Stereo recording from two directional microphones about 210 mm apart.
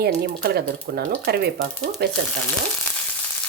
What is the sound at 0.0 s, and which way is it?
Speech, 50° right (ahead or behind).